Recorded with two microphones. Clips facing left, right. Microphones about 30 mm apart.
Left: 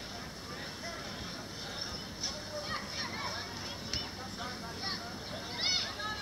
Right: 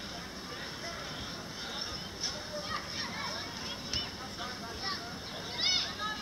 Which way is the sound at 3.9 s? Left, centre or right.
Centre.